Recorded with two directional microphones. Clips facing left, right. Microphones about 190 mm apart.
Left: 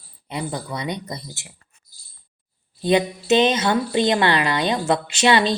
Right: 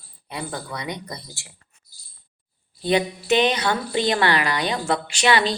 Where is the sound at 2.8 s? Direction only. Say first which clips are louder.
Left 2 dB; 20° left (ahead or behind).